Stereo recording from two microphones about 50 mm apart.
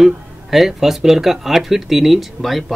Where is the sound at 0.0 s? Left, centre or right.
Centre.